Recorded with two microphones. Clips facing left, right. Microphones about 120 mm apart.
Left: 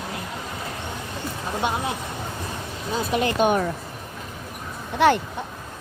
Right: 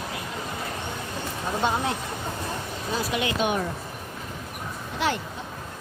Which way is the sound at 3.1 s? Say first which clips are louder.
Left 7 dB; 45° left (ahead or behind).